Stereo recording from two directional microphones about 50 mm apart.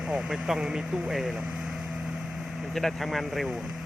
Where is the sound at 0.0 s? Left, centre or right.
Centre.